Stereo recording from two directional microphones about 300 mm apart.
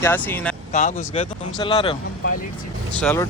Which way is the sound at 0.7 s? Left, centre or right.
Left.